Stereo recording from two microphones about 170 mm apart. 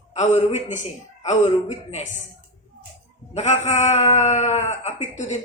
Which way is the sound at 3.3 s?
40° left (ahead or behind).